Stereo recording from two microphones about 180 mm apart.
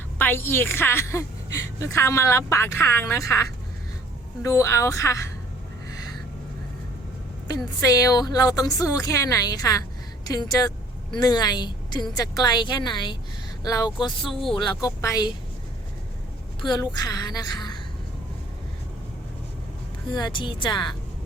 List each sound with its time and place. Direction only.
0.2 s a woman's voice: 10° left (ahead or behind)
4.4 s a woman's voice: 15° left (ahead or behind)
7.5 s speech: 20° left (ahead or behind)
16.6 s speech: 25° left (ahead or behind)
20.1 s speech: 25° left (ahead or behind)